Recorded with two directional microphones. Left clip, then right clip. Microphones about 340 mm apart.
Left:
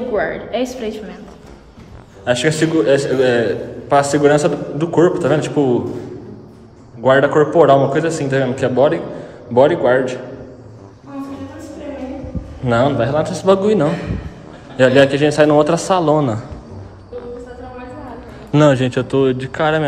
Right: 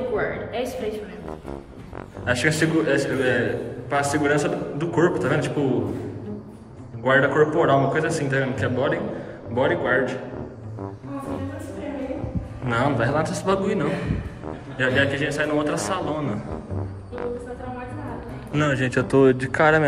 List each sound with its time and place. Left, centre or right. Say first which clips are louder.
0.1 s a woman's voice: left 7 dB; left
2.2 s a man's voice: left 6 dB; centre
7.0 s a man's voice: left 6 dB; centre
12.6 s a man's voice: left 7 dB; centre
18.5 s speech: left 10 dB; centre